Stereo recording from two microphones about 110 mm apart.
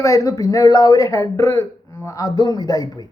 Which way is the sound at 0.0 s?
30° left (ahead or behind).